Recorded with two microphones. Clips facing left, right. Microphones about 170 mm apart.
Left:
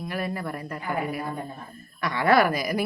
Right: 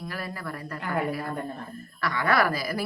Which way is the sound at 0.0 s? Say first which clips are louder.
Left 5 dB; 20° left (ahead or behind).